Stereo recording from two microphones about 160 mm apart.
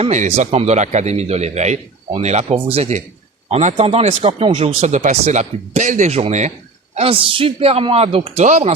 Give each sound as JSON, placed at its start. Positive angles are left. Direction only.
{"t": 0.0, "sound": "a man's voice", "side_deg": -45}